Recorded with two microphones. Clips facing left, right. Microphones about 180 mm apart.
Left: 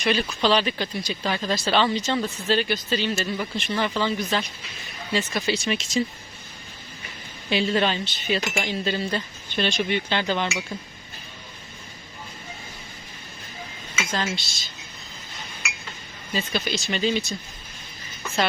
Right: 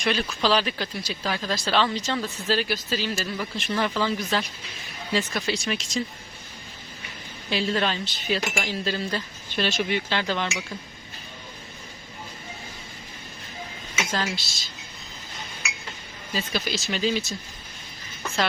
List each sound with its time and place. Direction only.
0.0 s speech: centre (ahead or behind)
7.5 s speech: centre (ahead or behind)
14.1 s speech: centre (ahead or behind)
16.3 s speech: centre (ahead or behind)